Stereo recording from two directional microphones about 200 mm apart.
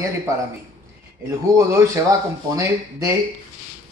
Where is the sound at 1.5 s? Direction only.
15° right (ahead or behind).